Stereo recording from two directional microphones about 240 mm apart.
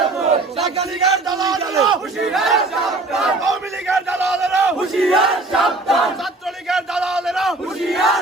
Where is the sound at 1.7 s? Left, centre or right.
Centre.